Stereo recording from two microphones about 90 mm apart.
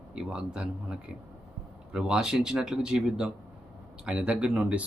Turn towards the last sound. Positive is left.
turn(degrees=-10)  # may be behind; listen again after turning